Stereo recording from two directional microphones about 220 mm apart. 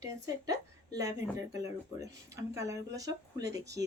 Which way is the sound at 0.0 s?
15° right (ahead or behind).